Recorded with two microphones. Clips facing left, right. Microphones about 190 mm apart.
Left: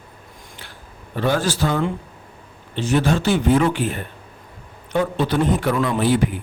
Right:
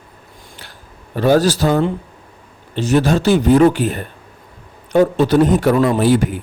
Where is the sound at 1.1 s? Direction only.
40° right (ahead or behind).